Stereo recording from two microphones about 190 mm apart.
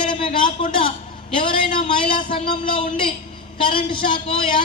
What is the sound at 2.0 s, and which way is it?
Speech, 25° left (ahead or behind).